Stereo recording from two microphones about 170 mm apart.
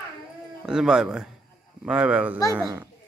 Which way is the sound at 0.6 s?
5° right (ahead or behind).